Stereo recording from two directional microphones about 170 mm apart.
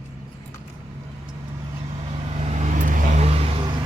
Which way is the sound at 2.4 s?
40° right (ahead or behind).